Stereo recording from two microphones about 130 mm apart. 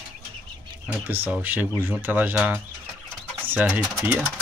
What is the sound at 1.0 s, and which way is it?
Speech, 15° right (ahead or behind).